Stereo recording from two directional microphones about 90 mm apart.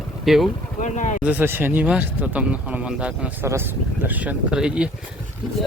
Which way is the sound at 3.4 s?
25° right (ahead or behind).